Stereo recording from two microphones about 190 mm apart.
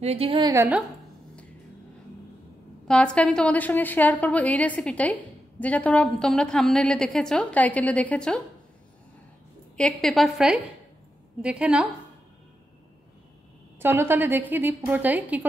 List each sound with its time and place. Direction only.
0.0 s a woman's voice: 30° right (ahead or behind)
2.9 s a woman's voice: 5° left (ahead or behind)
9.8 s a woman's voice: 5° left (ahead or behind)
13.7 s a woman's voice: 10° right (ahead or behind)